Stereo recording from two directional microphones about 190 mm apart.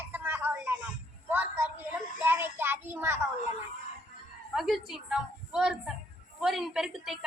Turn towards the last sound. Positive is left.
turn(degrees=0)  # may be behind; listen again after turning